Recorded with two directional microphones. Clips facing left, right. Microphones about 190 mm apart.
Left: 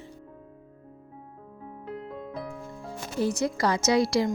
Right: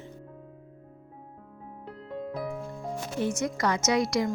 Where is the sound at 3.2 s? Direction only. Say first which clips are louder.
Left 3 dB; 35° left (ahead or behind).